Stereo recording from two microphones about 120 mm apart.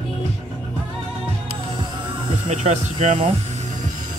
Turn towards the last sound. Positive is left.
turn(degrees=-70)  # may be behind; listen again after turning